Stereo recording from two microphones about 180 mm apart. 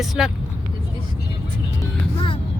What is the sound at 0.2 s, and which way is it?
Speech, 5° right (ahead or behind).